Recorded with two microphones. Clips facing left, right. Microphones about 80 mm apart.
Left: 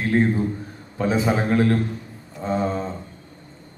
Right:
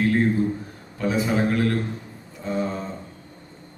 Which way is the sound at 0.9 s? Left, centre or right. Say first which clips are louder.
Left 2 dB; left.